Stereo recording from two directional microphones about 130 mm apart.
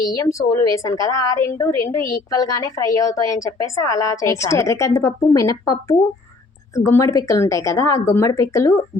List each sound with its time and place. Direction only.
0.0 s a woman's voice: 25° left (ahead or behind)